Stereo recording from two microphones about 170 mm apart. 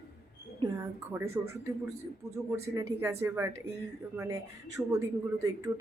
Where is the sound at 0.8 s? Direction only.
15° right (ahead or behind).